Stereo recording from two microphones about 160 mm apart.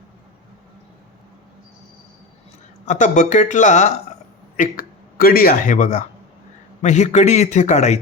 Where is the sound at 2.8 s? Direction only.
50° left (ahead or behind).